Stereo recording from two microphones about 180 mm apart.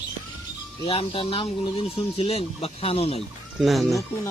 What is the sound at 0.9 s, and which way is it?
Speech, 30° left (ahead or behind).